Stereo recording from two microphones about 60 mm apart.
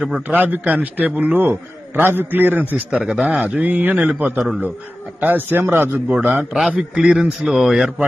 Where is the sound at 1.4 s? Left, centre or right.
Right.